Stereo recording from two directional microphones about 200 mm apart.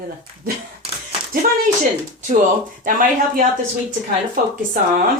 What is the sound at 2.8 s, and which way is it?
Speech, 45° right (ahead or behind).